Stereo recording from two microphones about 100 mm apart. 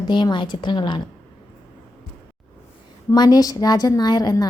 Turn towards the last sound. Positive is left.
turn(degrees=40)  # may be behind; listen again after turning